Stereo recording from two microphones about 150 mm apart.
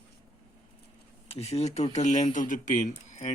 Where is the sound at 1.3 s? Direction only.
45° left (ahead or behind).